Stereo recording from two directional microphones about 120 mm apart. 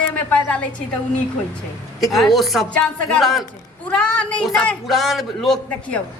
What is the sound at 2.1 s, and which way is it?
A man's voice, centre (ahead or behind).